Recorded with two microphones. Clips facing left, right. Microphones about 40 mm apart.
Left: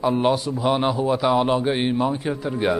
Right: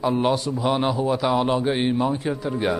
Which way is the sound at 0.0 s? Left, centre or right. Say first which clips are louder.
Left 1 dB; centre.